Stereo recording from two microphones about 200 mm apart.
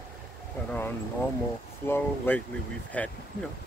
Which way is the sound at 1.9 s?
10° left (ahead or behind).